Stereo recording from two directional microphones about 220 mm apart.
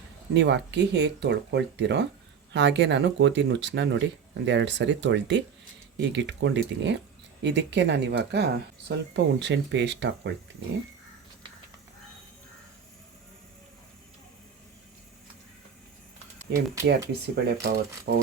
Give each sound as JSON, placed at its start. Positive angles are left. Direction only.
{"t": 0.3, "sound": "speech", "side_deg": -55}
{"t": 16.8, "sound": "speech", "side_deg": -45}